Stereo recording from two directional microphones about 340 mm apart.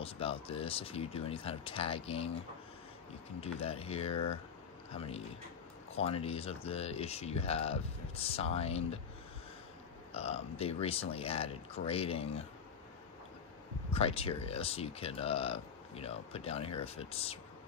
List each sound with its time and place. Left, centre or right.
0.0 s speech: centre
3.3 s speech: centre
10.1 s speech: centre
13.9 s speech: centre